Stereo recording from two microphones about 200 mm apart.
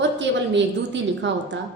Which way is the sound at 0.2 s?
65° right (ahead or behind).